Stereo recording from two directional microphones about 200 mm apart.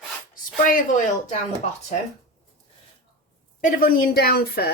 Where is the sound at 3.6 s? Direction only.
45° left (ahead or behind).